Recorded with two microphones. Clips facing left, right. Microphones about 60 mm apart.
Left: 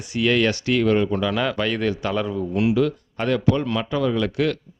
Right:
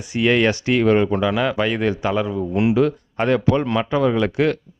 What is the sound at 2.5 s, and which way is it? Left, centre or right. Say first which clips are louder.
Speech: right 3 dB; right.